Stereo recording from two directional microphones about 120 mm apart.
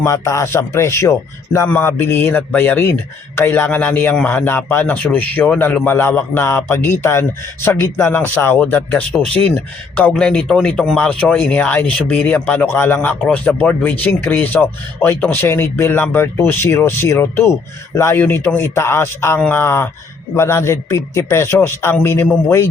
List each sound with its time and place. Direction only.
0.0 s a man's voice: 25° left (ahead or behind)